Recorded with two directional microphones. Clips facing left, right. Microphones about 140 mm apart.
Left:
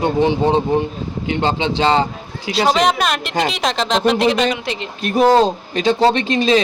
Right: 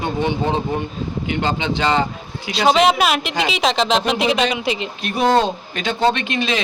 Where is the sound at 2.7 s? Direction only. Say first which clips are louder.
Right 3 dB; 5° right (ahead or behind).